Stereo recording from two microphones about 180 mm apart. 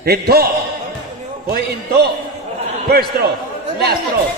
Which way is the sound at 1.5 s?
65° right (ahead or behind).